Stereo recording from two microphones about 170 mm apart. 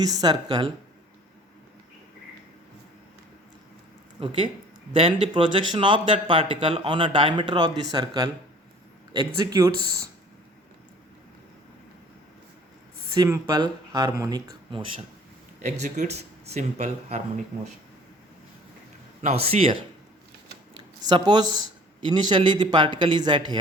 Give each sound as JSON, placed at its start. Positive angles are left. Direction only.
{"t": 0.0, "sound": "speech", "side_deg": -25}
{"t": 4.2, "sound": "speech", "side_deg": -30}
{"t": 13.1, "sound": "speech", "side_deg": -20}
{"t": 15.8, "sound": "speech", "side_deg": -40}
{"t": 19.2, "sound": "speech", "side_deg": -35}
{"t": 21.1, "sound": "speech", "side_deg": -25}